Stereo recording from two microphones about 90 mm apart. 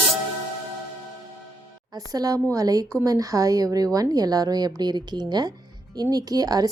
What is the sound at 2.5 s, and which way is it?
A woman's voice, 40° right (ahead or behind).